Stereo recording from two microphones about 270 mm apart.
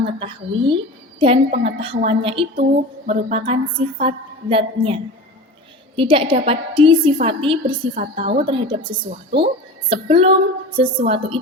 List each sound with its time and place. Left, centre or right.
0.0 s a woman's voice: centre
6.0 s a woman's voice: centre